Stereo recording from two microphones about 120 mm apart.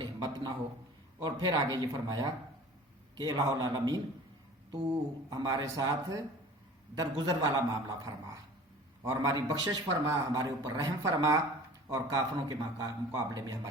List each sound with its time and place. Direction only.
0.0 s a sound: 35° right (ahead or behind)
1.2 s a man's voice: 35° right (ahead or behind)
5.3 s a man's voice: 35° right (ahead or behind)